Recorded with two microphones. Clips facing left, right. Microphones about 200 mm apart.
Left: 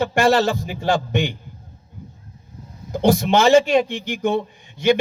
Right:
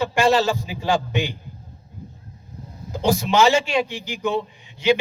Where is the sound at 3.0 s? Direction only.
55° left (ahead or behind).